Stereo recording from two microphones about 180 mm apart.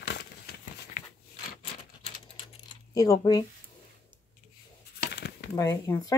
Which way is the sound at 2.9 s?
20° left (ahead or behind).